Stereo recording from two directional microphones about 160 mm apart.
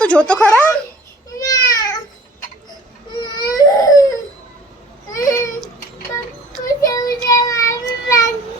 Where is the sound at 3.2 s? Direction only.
25° left (ahead or behind).